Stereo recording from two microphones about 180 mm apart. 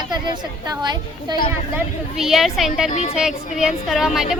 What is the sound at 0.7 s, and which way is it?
Speech, 25° right (ahead or behind).